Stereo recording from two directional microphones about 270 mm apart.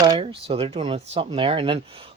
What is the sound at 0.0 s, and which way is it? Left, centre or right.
Speech, centre.